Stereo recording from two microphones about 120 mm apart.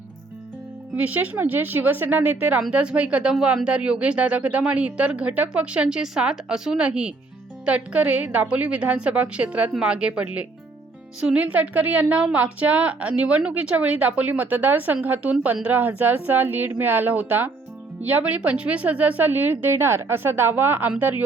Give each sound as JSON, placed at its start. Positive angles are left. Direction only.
{"t": 0.9, "sound": "speech", "side_deg": -15}